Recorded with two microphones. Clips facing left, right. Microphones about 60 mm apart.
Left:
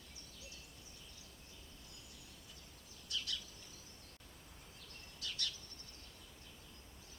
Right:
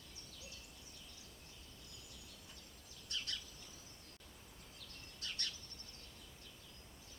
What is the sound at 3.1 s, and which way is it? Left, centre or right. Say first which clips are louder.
Bird vocalization: left 2 dB; right.